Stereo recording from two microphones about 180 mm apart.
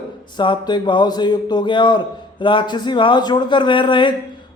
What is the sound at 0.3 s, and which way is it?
A man's voice, 25° left (ahead or behind).